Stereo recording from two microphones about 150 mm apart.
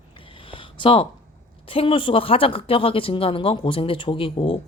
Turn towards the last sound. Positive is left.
turn(degrees=35)  # may be behind; listen again after turning